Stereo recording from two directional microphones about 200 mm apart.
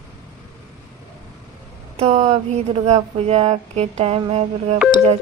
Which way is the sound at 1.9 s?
30° right (ahead or behind).